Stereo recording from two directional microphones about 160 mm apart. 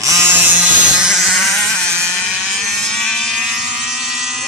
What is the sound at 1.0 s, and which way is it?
Vehicle, centre (ahead or behind).